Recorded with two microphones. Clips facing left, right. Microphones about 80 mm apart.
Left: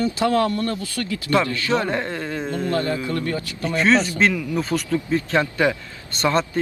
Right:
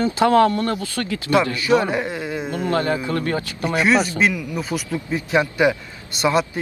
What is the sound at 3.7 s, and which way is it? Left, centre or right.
Speech, centre.